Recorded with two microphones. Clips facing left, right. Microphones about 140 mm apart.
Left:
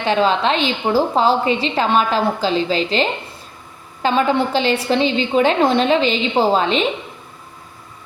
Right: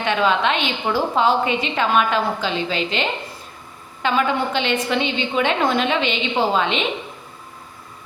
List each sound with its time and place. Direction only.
0.0 s a woman's voice: 30° left (ahead or behind)